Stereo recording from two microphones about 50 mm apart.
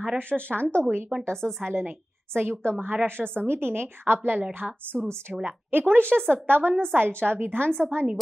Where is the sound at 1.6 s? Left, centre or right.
Right.